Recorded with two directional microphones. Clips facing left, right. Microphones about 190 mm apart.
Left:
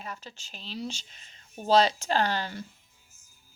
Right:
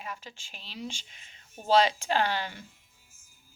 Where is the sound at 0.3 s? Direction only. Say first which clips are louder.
Left 4 dB; 40° left (ahead or behind).